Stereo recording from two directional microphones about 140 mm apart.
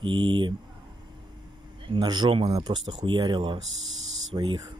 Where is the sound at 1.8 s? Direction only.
35° right (ahead or behind).